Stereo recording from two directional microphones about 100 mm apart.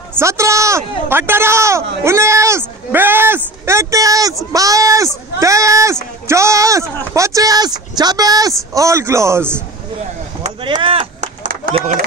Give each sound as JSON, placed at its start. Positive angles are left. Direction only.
{"t": 0.2, "sound": "speech", "side_deg": -30}
{"t": 10.6, "sound": "speech", "side_deg": -55}